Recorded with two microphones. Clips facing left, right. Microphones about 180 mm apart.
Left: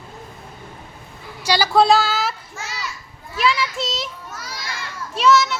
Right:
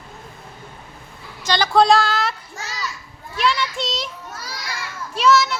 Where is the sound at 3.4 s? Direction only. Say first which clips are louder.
Left 1 dB; centre (ahead or behind).